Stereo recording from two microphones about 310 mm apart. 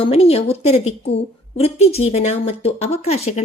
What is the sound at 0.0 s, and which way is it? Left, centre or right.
Speech, centre.